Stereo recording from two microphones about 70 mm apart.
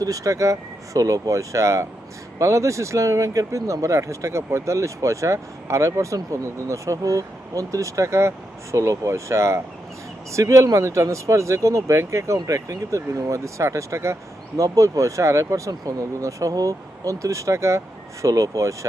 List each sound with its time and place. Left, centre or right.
0.0 s speech: right